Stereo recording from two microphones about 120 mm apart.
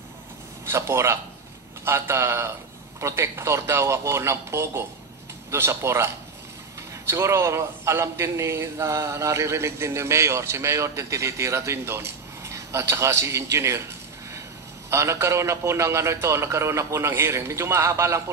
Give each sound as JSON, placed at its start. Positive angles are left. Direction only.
{"t": 0.7, "sound": "a man's voice", "side_deg": -20}
{"t": 14.9, "sound": "a man's voice", "side_deg": -25}